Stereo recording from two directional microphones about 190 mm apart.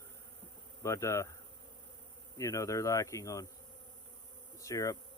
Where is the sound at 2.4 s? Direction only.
15° left (ahead or behind).